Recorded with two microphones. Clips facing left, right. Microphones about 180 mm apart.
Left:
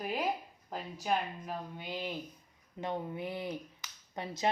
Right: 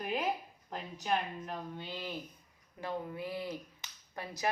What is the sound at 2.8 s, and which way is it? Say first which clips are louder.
A woman's voice: left 2 dB; 20° left (ahead or behind).